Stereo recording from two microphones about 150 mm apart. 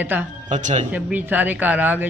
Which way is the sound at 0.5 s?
50° right (ahead or behind).